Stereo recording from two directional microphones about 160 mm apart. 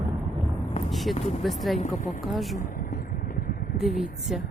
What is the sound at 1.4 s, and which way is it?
Speech, centre (ahead or behind).